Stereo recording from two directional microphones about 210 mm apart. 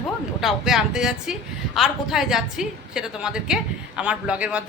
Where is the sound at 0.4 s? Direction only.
Centre (ahead or behind).